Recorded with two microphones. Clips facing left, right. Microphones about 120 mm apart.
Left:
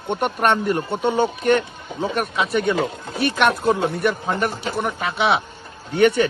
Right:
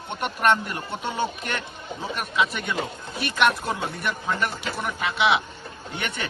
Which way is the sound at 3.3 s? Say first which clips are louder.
Left 3 dB; 60° left (ahead or behind).